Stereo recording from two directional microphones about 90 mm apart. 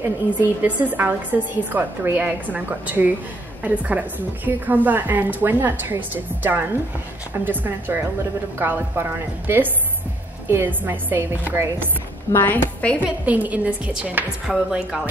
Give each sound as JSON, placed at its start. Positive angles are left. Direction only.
{"t": 0.0, "sound": "a woman's voice", "side_deg": -20}
{"t": 10.5, "sound": "a woman's voice", "side_deg": -20}
{"t": 12.3, "sound": "a woman's voice", "side_deg": 25}
{"t": 13.0, "sound": "a woman's voice", "side_deg": -15}
{"t": 14.5, "sound": "speech", "side_deg": -5}